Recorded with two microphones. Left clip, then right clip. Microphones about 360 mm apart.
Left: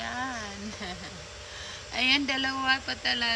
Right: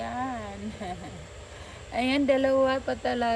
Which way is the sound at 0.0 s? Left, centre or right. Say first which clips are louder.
Right 1 dB; centre.